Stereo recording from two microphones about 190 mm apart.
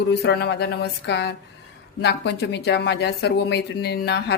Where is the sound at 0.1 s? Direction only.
60° left (ahead or behind).